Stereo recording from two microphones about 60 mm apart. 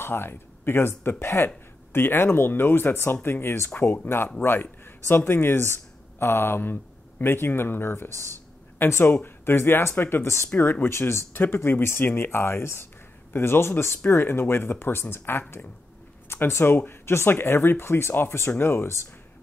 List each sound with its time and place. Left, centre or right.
0.0 s speech: left
8.1 s speech: right
8.7 s speech: left
10.5 s speech: left